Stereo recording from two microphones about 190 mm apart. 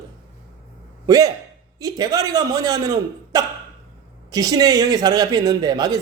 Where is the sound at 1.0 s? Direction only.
20° right (ahead or behind).